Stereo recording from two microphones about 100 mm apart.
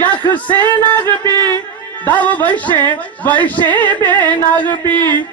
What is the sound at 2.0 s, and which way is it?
Speech, 15° left (ahead or behind).